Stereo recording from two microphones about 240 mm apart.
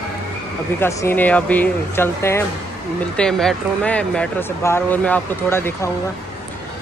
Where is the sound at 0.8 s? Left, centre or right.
Centre.